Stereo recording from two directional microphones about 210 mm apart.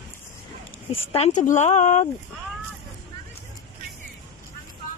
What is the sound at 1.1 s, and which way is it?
Speech, 35° left (ahead or behind).